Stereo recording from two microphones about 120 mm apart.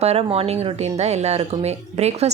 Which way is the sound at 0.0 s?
55° right (ahead or behind).